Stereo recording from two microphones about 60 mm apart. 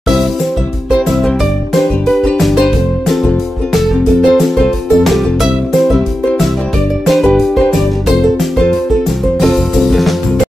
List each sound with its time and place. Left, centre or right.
2.3 s music: centre
3.7 s music: centre